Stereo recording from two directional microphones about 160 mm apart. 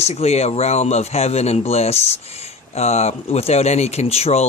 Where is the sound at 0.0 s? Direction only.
40° left (ahead or behind).